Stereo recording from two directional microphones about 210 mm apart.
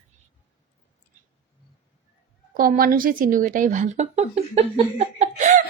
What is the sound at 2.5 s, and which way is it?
A woman's voice, 45° right (ahead or behind).